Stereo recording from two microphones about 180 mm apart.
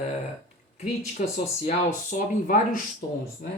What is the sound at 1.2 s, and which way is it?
Speech, 50° left (ahead or behind).